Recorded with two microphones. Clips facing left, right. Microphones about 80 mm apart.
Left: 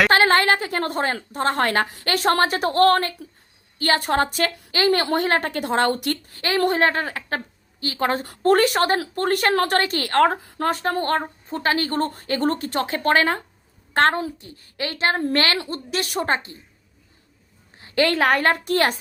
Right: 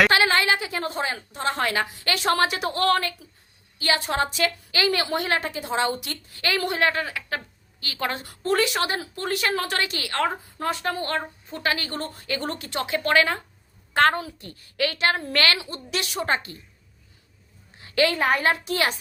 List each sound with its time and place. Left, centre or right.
0.1 s a woman's voice: left
17.7 s a sound: left
18.1 s a woman's voice: left